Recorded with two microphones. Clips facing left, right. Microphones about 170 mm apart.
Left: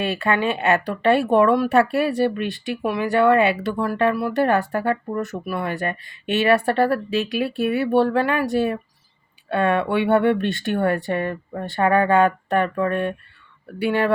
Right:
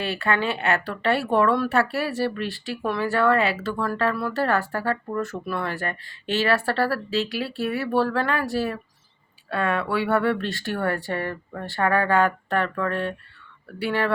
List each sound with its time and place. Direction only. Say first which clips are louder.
0.0 s speech: left 3 dB; 20° left (ahead or behind)